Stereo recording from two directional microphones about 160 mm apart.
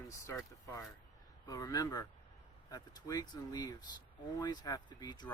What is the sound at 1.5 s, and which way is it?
Speech, 25° left (ahead or behind).